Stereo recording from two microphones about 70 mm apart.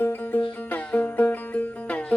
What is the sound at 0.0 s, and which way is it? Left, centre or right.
Music, left.